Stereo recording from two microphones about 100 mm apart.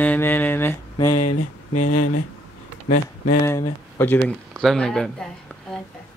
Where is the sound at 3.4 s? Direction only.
30° left (ahead or behind).